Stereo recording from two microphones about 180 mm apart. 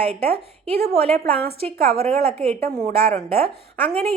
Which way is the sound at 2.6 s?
55° right (ahead or behind).